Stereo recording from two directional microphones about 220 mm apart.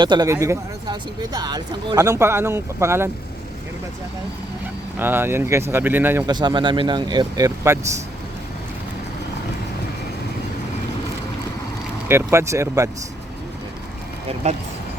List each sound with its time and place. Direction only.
0.0 s speech: 20° right (ahead or behind)
4.9 s speech: 10° right (ahead or behind)
12.0 s speech: 10° right (ahead or behind)
14.4 s speech: 30° right (ahead or behind)